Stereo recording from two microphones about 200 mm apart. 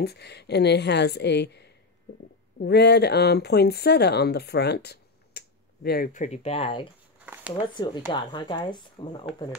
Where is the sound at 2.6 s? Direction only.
55° left (ahead or behind).